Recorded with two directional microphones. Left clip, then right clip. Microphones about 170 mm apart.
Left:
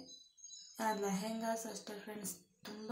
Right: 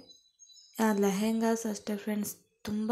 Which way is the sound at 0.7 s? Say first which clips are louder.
Right 9 dB; 40° right (ahead or behind).